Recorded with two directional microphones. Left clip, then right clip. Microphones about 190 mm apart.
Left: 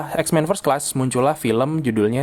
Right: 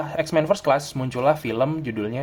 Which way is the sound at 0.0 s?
40° left (ahead or behind).